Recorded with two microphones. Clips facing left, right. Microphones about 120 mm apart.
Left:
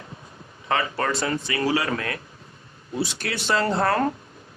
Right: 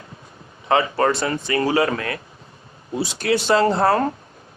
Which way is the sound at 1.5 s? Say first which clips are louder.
Right 6 dB; 40° right (ahead or behind).